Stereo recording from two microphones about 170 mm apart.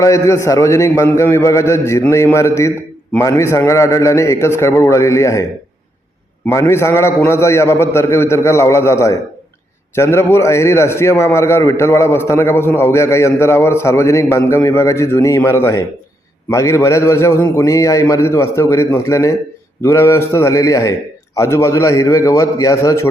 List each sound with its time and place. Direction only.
0.0 s a man's voice: 20° left (ahead or behind)
6.5 s a man's voice: 15° left (ahead or behind)